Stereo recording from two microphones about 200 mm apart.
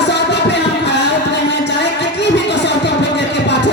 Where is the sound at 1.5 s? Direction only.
60° left (ahead or behind).